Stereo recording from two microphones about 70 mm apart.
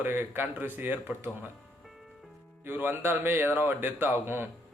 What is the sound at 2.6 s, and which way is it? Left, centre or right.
Speech, right.